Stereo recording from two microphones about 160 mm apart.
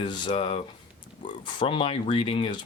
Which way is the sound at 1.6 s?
35° left (ahead or behind).